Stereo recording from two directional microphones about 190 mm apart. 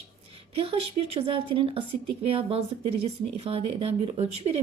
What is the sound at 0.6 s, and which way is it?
Speech, 30° right (ahead or behind).